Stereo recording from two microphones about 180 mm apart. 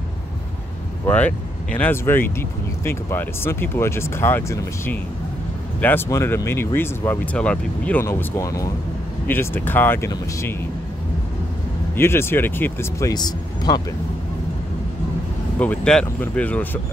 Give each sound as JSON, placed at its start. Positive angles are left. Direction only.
{"t": 1.0, "sound": "speech", "side_deg": 10}
{"t": 12.0, "sound": "speech", "side_deg": 15}
{"t": 13.1, "sound": "speech", "side_deg": 20}
{"t": 15.6, "sound": "speech", "side_deg": 5}